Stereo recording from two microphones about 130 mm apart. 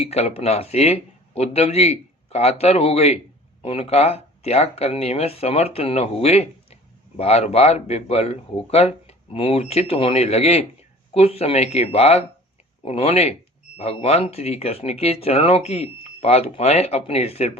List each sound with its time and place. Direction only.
0.0 s speech: 55° left (ahead or behind)